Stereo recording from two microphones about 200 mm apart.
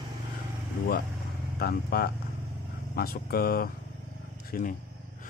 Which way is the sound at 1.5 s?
50° left (ahead or behind).